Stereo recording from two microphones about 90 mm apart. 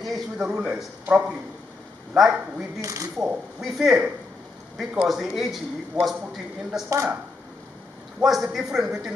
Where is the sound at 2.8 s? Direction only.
35° right (ahead or behind).